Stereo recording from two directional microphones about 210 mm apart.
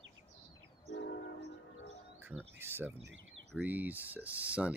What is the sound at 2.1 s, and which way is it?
Insect, 10° right (ahead or behind).